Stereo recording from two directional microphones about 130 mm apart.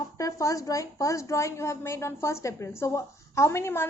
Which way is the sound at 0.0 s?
25° left (ahead or behind).